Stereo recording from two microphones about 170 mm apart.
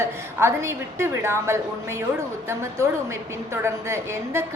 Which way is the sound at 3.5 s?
15° right (ahead or behind).